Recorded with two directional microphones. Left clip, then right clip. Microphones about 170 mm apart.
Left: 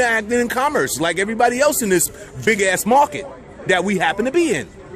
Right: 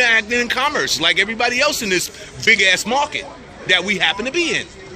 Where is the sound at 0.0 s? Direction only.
45° left (ahead or behind).